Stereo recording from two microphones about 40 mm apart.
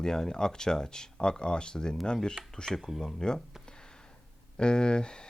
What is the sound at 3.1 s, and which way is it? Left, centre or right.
Speech, centre.